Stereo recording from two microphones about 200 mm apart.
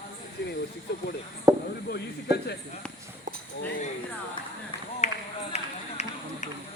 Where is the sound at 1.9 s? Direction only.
55° left (ahead or behind).